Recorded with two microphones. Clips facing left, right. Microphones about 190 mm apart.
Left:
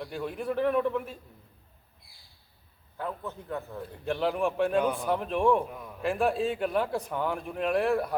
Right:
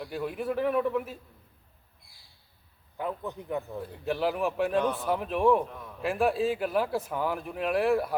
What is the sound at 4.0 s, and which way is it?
A man's voice, centre (ahead or behind).